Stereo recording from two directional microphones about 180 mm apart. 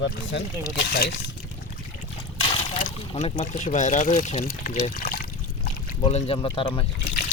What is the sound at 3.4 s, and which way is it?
Speech, 45° left (ahead or behind).